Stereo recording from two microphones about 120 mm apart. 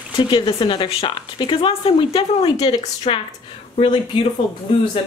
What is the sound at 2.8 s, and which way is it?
Speech, 60° left (ahead or behind).